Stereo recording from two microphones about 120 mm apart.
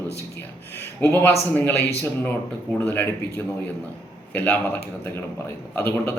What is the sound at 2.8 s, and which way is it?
Speech, 15° left (ahead or behind).